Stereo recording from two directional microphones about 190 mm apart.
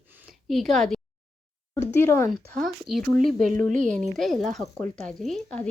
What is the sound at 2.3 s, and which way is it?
Speech, centre (ahead or behind).